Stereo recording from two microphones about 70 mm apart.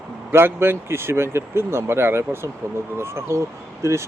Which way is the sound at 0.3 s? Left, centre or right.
Right.